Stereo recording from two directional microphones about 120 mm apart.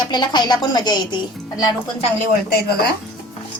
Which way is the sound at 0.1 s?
35° left (ahead or behind).